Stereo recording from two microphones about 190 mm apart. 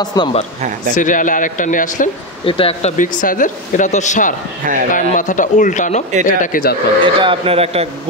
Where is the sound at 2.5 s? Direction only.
30° left (ahead or behind).